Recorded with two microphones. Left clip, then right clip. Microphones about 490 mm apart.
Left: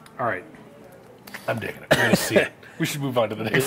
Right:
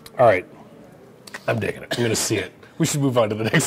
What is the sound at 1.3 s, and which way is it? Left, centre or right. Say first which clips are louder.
Speech: right 4 dB; right.